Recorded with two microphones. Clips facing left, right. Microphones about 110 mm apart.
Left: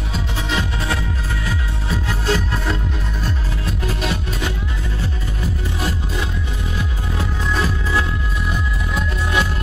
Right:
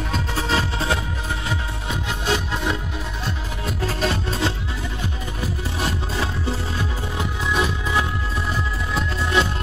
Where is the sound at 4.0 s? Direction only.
30° right (ahead or behind).